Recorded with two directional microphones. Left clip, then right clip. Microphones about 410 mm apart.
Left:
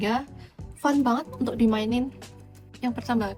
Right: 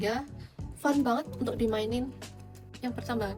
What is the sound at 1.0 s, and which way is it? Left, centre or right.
Speech, centre.